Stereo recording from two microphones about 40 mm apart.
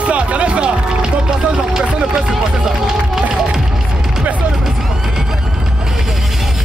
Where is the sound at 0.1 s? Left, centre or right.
Right.